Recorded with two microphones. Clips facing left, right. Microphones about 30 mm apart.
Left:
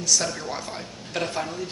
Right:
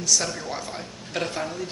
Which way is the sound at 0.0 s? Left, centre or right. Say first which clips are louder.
Even; centre.